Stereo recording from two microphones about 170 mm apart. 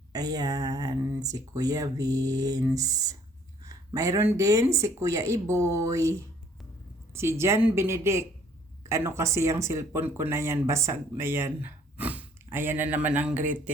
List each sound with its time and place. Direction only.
0.1 s speech: 20° right (ahead or behind)